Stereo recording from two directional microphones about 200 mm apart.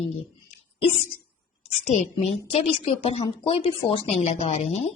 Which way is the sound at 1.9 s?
30° left (ahead or behind).